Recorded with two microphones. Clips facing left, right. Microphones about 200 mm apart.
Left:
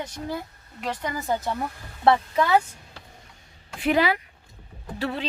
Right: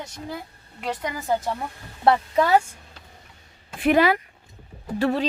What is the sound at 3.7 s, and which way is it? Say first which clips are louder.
Speech: right 3 dB; 50° right (ahead or behind).